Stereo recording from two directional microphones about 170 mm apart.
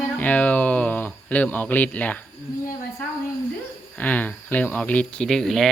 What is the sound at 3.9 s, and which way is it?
Speech, 10° left (ahead or behind).